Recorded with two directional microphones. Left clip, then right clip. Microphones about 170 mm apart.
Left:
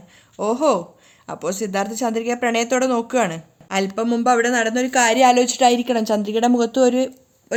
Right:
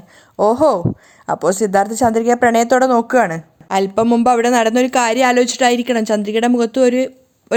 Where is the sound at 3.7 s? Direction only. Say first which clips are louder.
Right 7 dB; 40° right (ahead or behind).